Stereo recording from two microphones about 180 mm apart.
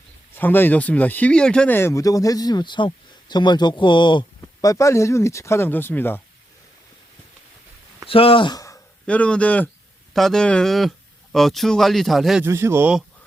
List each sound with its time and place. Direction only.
0.3 s speech: 10° left (ahead or behind)
8.0 s speech: 30° left (ahead or behind)
9.0 s speech: 5° left (ahead or behind)
12.5 s a man's voice: 15° right (ahead or behind)